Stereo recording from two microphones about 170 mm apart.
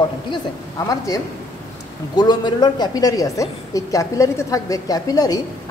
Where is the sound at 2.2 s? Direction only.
25° left (ahead or behind).